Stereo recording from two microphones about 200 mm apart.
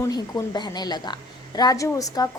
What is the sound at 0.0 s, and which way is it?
A woman's voice, 15° left (ahead or behind).